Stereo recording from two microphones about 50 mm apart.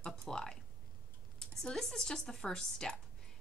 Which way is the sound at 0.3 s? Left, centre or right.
Centre.